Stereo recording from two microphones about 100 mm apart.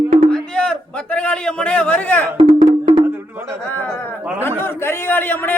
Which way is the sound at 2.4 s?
70° right (ahead or behind).